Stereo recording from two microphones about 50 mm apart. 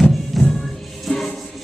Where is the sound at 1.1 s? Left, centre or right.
Centre.